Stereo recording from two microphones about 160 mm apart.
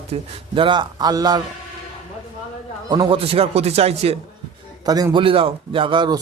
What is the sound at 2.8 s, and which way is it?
Speech, 25° right (ahead or behind).